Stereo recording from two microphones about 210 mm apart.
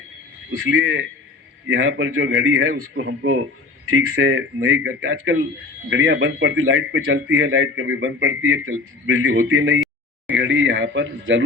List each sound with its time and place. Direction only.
0.5 s a man's voice: 70° right (ahead or behind)
2.9 s a man's voice: 60° right (ahead or behind)
3.8 s a man's voice: 80° right; by 11.4 s 65° right (ahead or behind)